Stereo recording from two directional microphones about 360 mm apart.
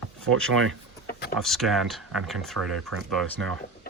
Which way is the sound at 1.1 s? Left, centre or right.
Left.